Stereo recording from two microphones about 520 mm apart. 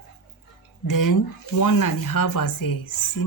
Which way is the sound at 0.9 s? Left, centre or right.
Left.